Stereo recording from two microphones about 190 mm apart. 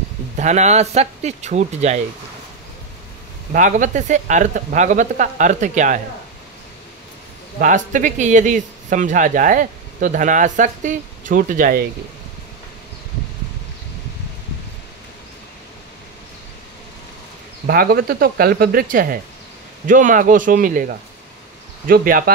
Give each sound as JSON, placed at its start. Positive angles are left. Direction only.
{"t": 0.4, "sound": "speech", "side_deg": -35}
{"t": 3.5, "sound": "speech", "side_deg": -45}
{"t": 7.5, "sound": "a man's voice", "side_deg": -45}
{"t": 17.6, "sound": "a man's voice", "side_deg": -50}